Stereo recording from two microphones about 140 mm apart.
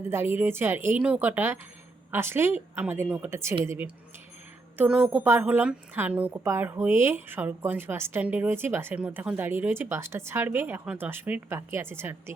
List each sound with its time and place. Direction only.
0.1 s a woman's voice: 15° right (ahead or behind)